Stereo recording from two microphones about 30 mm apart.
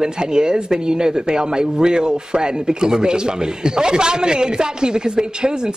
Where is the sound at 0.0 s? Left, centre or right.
Right.